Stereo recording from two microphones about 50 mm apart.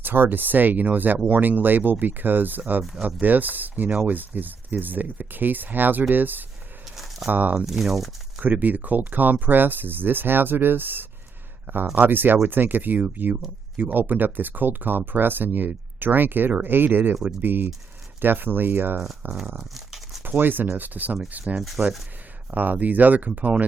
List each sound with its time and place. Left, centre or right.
0.0 s speech: right
6.9 s a sound: centre
7.3 s speech: right
7.6 s speech: centre
8.4 s speech: right
19.3 s a sound: centre
20.2 s speech: right
21.3 s speech: right
21.6 s speech: centre
22.5 s speech: right